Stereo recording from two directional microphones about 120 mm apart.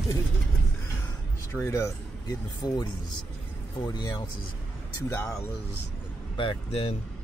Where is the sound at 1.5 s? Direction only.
20° left (ahead or behind).